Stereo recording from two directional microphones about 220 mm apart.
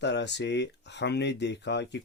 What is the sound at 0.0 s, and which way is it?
Speech, 50° left (ahead or behind).